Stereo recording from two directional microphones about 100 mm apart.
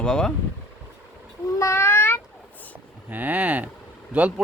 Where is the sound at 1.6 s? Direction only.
30° left (ahead or behind).